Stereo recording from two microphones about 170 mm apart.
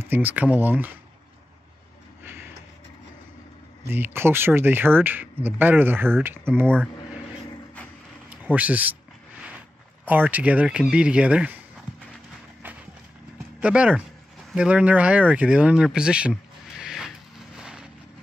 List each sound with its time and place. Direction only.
0.0 s speech: 10° right (ahead or behind)
2.2 s vehicle: 10° right (ahead or behind)
3.9 s speech: 15° right (ahead or behind)
8.3 s speech: 10° right (ahead or behind)
10.0 s speech: 10° right (ahead or behind)
12.6 s clip-clop: 10° right (ahead or behind)
13.6 s speech: 5° right (ahead or behind)
17.6 s vehicle: 5° right (ahead or behind)